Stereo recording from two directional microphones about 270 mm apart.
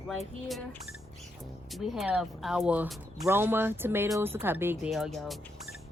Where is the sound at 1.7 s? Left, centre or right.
Centre.